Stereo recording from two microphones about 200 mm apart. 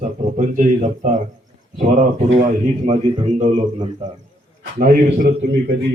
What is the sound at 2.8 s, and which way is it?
Speech, 35° right (ahead or behind).